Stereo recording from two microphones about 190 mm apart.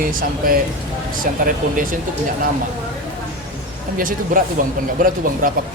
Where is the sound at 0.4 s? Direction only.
50° right (ahead or behind).